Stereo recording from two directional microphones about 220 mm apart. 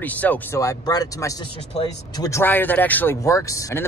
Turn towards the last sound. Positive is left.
turn(degrees=15)  # may be behind; listen again after turning